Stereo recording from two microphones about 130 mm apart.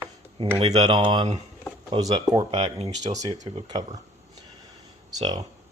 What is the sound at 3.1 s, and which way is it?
Speech, 30° right (ahead or behind).